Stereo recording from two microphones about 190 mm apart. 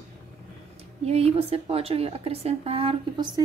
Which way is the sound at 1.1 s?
35° right (ahead or behind).